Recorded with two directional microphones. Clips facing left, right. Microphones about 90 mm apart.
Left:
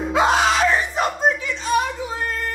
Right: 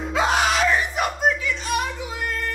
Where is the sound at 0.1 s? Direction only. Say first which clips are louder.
Left 3 dB; 20° left (ahead or behind).